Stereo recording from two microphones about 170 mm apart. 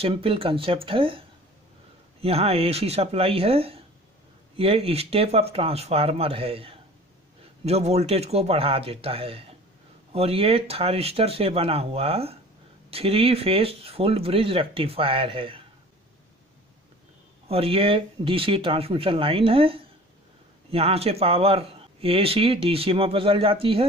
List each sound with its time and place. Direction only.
0.0 s speech: 35° right (ahead or behind)
2.2 s speech: 35° right (ahead or behind)
17.5 s speech: 35° right (ahead or behind)